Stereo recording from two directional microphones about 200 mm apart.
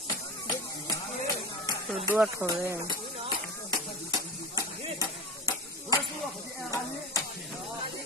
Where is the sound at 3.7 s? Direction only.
20° left (ahead or behind).